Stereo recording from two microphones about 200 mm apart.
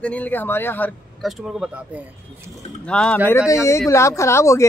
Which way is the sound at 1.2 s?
5° right (ahead or behind).